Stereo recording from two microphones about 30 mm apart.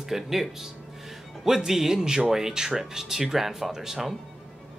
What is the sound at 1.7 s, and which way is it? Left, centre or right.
A man's voice, centre.